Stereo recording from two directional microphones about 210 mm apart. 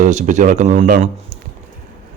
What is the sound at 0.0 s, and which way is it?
Speech, 35° right (ahead or behind).